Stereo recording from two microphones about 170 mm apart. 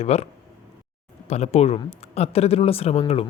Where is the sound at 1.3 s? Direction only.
40° left (ahead or behind).